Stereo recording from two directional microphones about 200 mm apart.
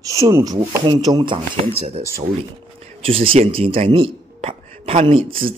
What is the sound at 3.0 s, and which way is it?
A man's voice, 30° right (ahead or behind).